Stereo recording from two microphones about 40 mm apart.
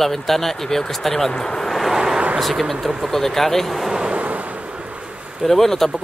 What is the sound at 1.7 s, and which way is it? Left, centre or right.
Vehicle, centre.